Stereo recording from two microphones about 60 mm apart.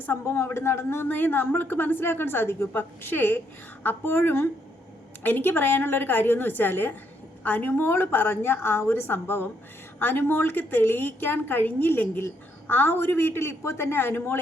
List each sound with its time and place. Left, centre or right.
0.3 s a woman's voice: left